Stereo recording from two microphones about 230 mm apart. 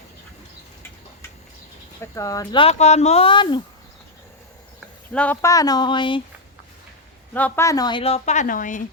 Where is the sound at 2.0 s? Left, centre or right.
Centre.